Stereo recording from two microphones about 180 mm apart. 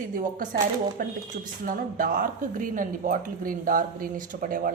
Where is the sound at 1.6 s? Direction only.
50° right (ahead or behind).